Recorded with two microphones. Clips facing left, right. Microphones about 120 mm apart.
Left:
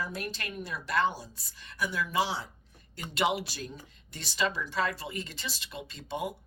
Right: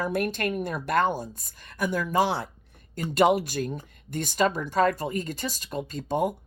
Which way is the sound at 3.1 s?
45° right (ahead or behind).